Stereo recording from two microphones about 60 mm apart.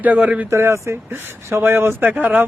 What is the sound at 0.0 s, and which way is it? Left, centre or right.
Speech, right.